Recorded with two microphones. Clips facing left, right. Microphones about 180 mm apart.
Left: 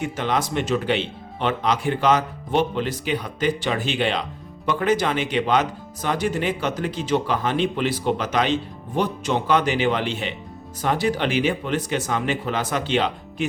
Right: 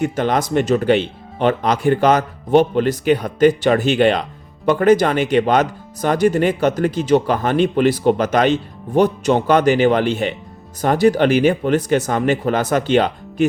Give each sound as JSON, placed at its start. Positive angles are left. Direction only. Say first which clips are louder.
{"t": 0.0, "sound": "speech", "louder": "right 6 dB", "side_deg": -45}